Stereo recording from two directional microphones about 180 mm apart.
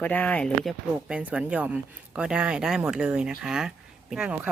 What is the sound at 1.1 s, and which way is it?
Speech, 5° right (ahead or behind).